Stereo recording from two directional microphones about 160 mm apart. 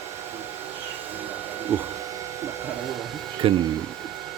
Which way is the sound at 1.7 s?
15° right (ahead or behind).